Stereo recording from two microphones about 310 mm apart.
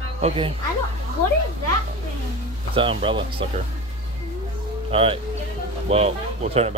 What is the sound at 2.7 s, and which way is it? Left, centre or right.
Speech, centre.